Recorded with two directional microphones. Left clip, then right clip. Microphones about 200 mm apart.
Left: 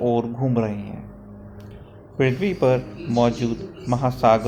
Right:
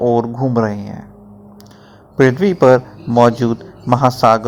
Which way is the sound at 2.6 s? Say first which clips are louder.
Right 10 dB; 35° right (ahead or behind).